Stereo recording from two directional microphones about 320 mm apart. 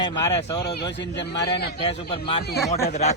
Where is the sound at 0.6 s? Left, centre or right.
Left.